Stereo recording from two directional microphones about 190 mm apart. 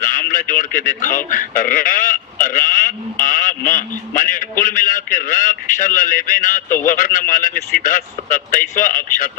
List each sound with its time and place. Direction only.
0.0 s speech: 45° left (ahead or behind)